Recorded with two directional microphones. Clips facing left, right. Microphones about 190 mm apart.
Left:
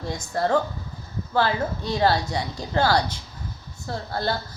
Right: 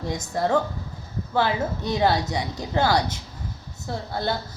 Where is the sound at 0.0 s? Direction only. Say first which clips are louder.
Even; 20° right (ahead or behind).